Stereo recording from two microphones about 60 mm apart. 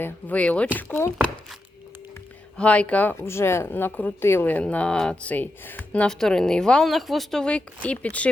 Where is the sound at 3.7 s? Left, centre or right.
Left.